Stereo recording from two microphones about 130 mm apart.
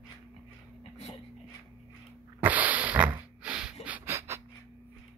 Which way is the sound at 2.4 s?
10° right (ahead or behind).